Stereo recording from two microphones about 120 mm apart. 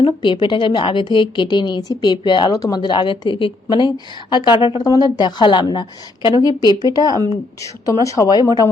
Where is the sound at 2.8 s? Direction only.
45° left (ahead or behind).